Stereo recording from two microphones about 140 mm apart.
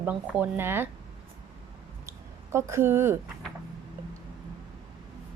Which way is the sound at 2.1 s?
20° right (ahead or behind).